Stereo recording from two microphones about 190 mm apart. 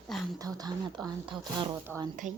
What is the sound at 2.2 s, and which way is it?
Speech, 40° right (ahead or behind).